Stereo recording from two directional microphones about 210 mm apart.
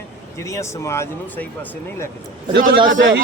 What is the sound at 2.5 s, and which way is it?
Speech, 55° right (ahead or behind).